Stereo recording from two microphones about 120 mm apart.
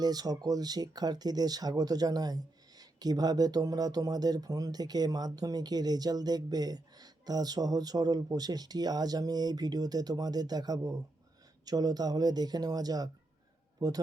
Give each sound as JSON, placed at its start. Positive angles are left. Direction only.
{"t": 0.0, "sound": "a man's voice", "side_deg": -35}